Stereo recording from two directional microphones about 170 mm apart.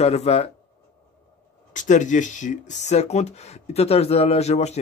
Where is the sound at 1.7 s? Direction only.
45° left (ahead or behind).